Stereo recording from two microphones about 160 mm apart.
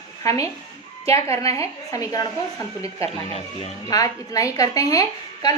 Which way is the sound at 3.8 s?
20° left (ahead or behind).